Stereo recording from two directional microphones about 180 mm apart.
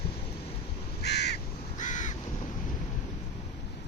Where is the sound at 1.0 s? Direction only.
70° left (ahead or behind).